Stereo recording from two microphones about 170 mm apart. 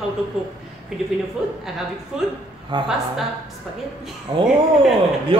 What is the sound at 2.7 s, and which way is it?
Speech, 30° right (ahead or behind).